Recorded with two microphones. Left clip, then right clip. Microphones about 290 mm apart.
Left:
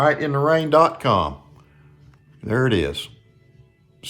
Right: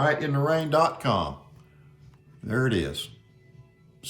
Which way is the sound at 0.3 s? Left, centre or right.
Left.